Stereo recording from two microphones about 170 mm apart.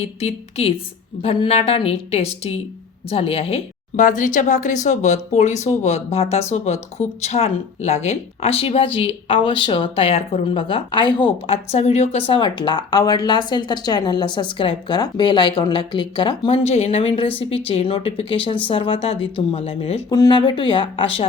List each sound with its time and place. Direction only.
0.0 s a woman's voice: 40° left (ahead or behind)
20.1 s speech: 25° left (ahead or behind)